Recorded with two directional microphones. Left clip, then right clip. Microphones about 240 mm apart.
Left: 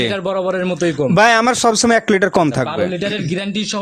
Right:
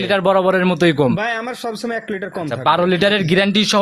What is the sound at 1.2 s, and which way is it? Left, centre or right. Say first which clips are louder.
A man's voice: left 10 dB; left.